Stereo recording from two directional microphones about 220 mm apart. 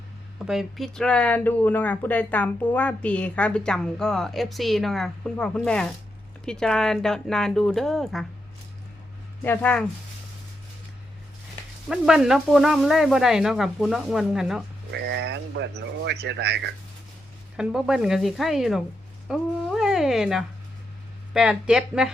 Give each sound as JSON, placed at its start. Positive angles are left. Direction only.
{"t": 0.4, "sound": "speech", "side_deg": 0}
{"t": 9.4, "sound": "speech", "side_deg": 5}
{"t": 11.9, "sound": "speech", "side_deg": -5}
{"t": 14.9, "sound": "speech", "side_deg": -50}
{"t": 17.6, "sound": "speech", "side_deg": 0}